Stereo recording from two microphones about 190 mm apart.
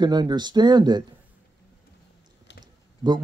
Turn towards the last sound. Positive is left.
turn(degrees=0)  # may be behind; listen again after turning